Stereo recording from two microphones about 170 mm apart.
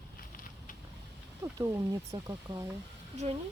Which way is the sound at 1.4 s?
20° right (ahead or behind).